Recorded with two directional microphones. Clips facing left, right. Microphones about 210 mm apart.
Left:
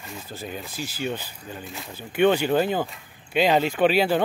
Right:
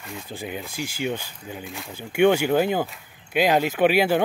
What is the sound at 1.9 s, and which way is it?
Speech, 10° right (ahead or behind).